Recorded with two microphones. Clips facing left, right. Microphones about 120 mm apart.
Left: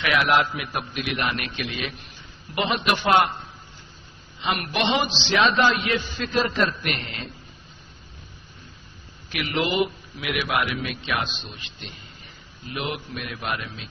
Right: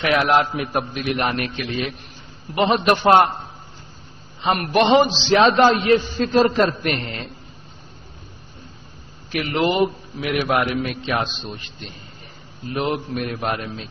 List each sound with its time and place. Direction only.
0.0 s a man's voice: 40° right (ahead or behind)
2.5 s a man's voice: 40° right (ahead or behind)
9.3 s a man's voice: 35° right (ahead or behind)